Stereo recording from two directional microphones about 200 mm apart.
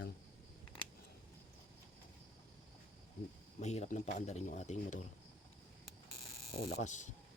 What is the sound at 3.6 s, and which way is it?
Speech, 35° left (ahead or behind).